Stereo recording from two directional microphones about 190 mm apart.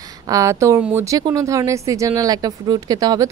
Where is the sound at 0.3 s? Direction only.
15° right (ahead or behind).